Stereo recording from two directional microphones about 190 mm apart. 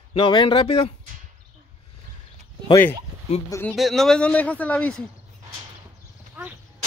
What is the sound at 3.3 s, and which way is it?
Speech, 30° left (ahead or behind).